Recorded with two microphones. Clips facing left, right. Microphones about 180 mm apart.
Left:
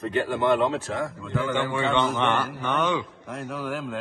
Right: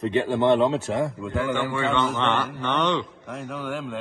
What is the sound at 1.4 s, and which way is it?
A man's voice, 20° left (ahead or behind).